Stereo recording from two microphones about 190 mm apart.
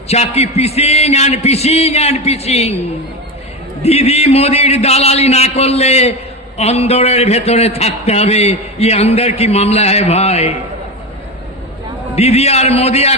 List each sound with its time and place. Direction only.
0.1 s a man's voice: 35° left (ahead or behind)
3.8 s a man's voice: 35° left (ahead or behind)
12.1 s a man's voice: 35° left (ahead or behind)